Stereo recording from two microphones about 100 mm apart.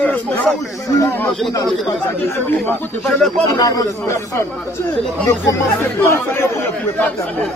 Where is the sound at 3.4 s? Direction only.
35° left (ahead or behind).